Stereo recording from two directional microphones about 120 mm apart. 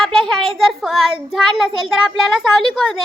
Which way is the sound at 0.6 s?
Centre (ahead or behind).